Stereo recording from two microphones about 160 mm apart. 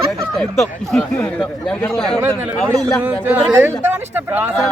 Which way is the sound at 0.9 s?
5° left (ahead or behind).